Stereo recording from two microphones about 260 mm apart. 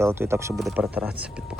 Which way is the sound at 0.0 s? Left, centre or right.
Centre.